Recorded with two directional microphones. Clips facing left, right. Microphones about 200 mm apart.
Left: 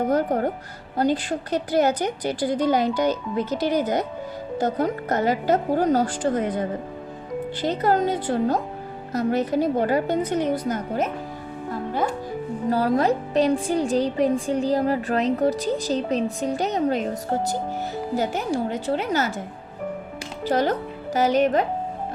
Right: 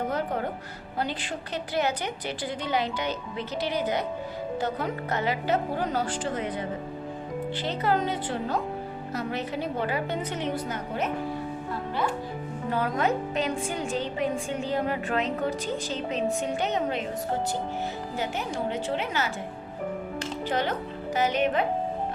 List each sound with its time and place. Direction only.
0.1 s a woman's voice: 40° left (ahead or behind)
12.7 s speech: 35° left (ahead or behind)
18.2 s speech: 40° left (ahead or behind)
20.4 s speech: 40° left (ahead or behind)